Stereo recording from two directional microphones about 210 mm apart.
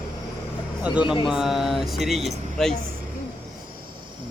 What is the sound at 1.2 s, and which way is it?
Speech, centre (ahead or behind).